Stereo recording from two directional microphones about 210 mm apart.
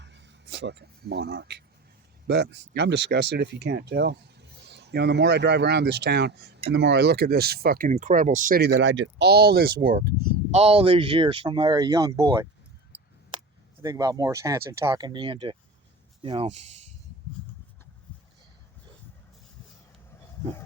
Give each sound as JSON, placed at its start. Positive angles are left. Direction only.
{"t": 0.0, "sound": "speech", "side_deg": -55}
{"t": 10.6, "sound": "speech", "side_deg": -30}
{"t": 13.8, "sound": "speech", "side_deg": -15}